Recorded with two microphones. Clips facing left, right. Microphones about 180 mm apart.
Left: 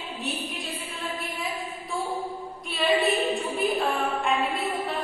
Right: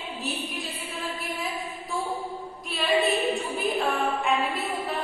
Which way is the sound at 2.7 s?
Centre (ahead or behind).